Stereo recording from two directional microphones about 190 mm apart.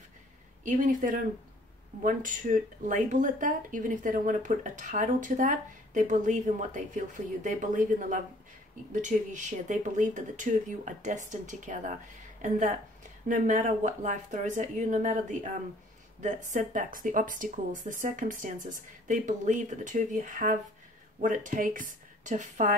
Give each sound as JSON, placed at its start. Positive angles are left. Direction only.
{"t": 0.7, "sound": "speech", "side_deg": -45}